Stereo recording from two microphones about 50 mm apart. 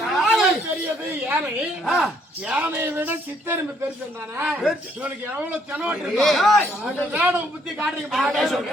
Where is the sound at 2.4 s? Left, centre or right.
Right.